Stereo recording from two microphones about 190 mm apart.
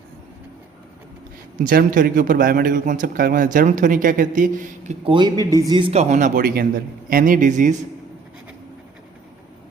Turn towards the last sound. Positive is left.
turn(degrees=-40)  # may be behind; listen again after turning